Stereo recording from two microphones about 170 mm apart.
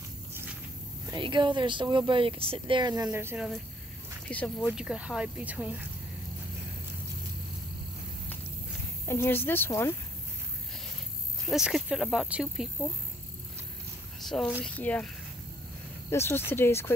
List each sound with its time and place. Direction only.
1.1 s speech: 25° right (ahead or behind)
3.1 s speech: 10° right (ahead or behind)
4.3 s speech: 10° left (ahead or behind)
4.7 s speech: 5° right (ahead or behind)
9.0 s speech: 15° left (ahead or behind)
11.4 s speech: centre (ahead or behind)
14.6 s speech: 10° left (ahead or behind)
16.1 s speech: 15° left (ahead or behind)